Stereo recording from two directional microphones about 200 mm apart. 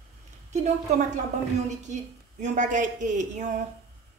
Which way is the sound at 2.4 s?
40° right (ahead or behind).